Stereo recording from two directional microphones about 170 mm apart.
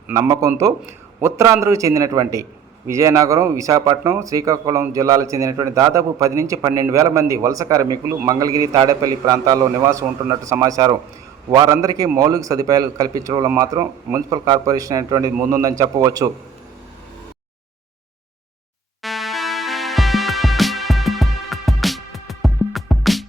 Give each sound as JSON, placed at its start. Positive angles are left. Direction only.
{"t": 0.1, "sound": "speech", "side_deg": -20}
{"t": 19.0, "sound": "music", "side_deg": 0}